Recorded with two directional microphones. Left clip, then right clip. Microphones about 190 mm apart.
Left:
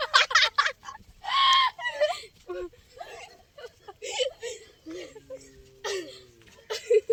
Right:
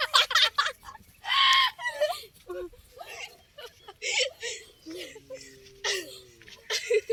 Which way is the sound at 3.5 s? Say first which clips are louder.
Left 1 dB; 35° left (ahead or behind).